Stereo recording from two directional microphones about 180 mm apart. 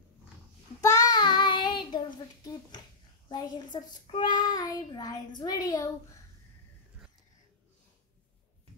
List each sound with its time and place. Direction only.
0.7 s child singing: 20° left (ahead or behind)
3.3 s a woman's voice: 25° left (ahead or behind)
3.7 s child singing: 25° left (ahead or behind)